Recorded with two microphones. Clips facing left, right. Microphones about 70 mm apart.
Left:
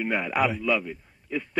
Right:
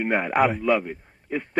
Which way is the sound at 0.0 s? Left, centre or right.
Right.